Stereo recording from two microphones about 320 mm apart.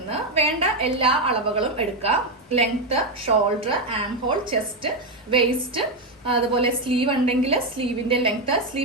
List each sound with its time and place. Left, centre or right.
0.1 s a woman's voice: centre